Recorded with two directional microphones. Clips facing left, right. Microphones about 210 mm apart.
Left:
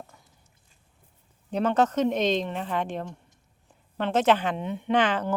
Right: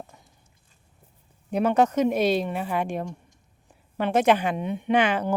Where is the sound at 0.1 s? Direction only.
20° right (ahead or behind).